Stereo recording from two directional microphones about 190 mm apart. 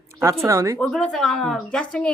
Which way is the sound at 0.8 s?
Centre (ahead or behind).